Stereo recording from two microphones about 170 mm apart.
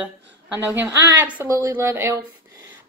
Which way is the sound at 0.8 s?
10° right (ahead or behind).